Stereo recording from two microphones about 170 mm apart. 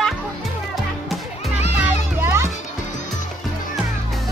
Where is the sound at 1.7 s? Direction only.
10° right (ahead or behind).